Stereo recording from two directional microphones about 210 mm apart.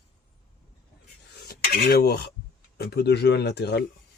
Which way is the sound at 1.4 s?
50° left (ahead or behind).